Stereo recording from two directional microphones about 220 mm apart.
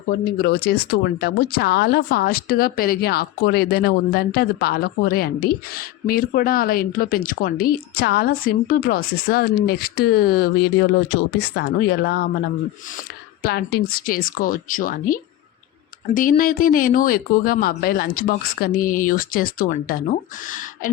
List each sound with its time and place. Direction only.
0.3 s speech: 45° left (ahead or behind)
13.4 s speech: 45° left (ahead or behind)